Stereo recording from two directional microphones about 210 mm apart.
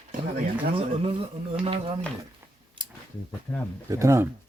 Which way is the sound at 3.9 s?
15° right (ahead or behind).